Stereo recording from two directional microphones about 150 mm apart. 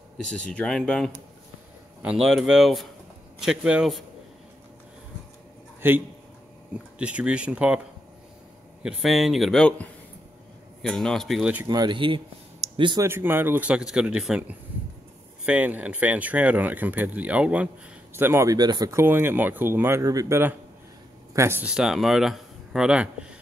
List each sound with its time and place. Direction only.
0.3 s speech: 5° left (ahead or behind)
5.8 s a sound: 15° right (ahead or behind)
7.0 s speech: 10° right (ahead or behind)
8.8 s speech: centre (ahead or behind)
11.6 s speech: 25° right (ahead or behind)
13.0 s speech: 15° right (ahead or behind)